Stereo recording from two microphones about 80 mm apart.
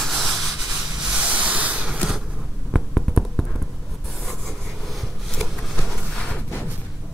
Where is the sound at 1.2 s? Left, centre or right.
Centre.